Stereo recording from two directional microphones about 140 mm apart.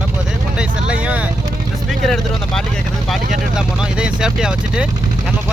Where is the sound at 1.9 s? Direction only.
Centre (ahead or behind).